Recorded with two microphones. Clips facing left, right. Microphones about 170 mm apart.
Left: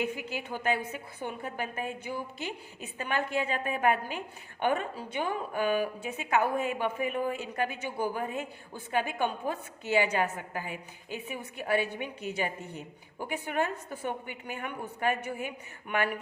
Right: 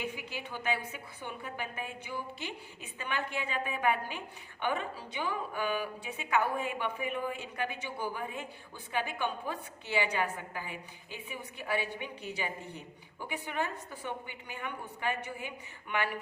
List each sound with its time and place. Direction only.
0.0 s a woman's voice: 45° left (ahead or behind)